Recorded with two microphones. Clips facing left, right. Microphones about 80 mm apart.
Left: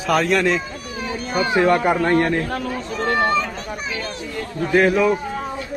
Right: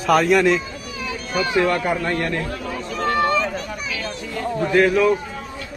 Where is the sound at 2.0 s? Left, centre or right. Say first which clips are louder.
Left 5 dB; left.